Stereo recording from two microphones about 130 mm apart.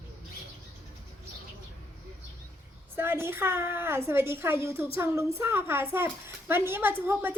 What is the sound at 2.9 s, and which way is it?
A woman's voice, 20° right (ahead or behind).